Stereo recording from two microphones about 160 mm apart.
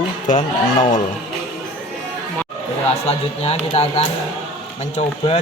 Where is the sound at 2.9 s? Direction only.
40° left (ahead or behind).